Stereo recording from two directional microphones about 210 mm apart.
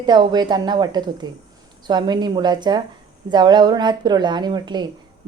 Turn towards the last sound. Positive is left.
turn(degrees=-20)  # may be behind; listen again after turning